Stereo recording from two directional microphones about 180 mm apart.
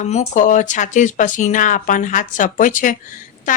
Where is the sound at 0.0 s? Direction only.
40° left (ahead or behind).